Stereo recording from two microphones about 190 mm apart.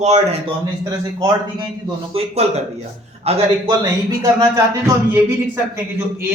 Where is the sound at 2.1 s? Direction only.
30° right (ahead or behind).